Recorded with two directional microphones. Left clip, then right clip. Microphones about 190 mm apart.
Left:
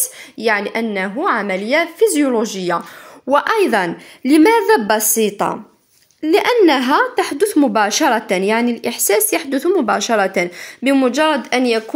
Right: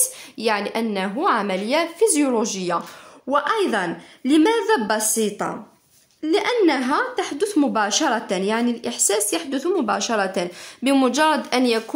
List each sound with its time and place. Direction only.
0.4 s a woman's voice: 15° left (ahead or behind)